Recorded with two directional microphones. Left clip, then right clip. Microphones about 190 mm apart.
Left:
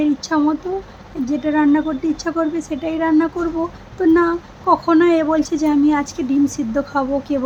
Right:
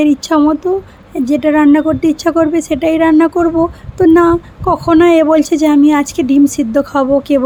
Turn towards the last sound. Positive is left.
turn(degrees=-45)  # may be behind; listen again after turning